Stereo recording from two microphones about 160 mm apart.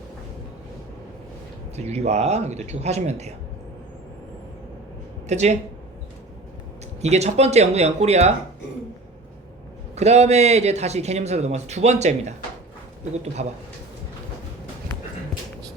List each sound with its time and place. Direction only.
1.7 s speech: 45° right (ahead or behind)
5.3 s speech: 45° right (ahead or behind)
7.0 s speech: 45° right (ahead or behind)
9.9 s speech: 45° right (ahead or behind)